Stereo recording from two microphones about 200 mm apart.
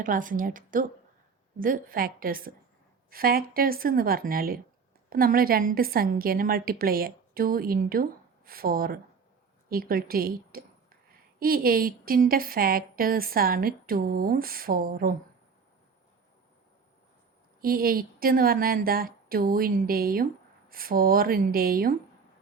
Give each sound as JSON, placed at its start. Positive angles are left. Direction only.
{"t": 0.0, "sound": "a woman's voice", "side_deg": -40}
{"t": 17.6, "sound": "a woman's voice", "side_deg": -45}